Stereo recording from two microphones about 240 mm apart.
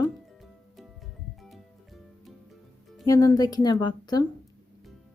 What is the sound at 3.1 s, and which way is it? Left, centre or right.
A woman's voice, centre.